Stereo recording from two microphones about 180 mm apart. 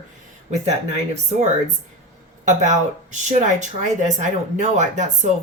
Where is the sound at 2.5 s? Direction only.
40° right (ahead or behind).